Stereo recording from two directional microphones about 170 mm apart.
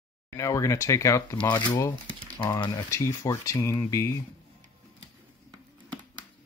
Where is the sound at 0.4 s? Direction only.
20° left (ahead or behind).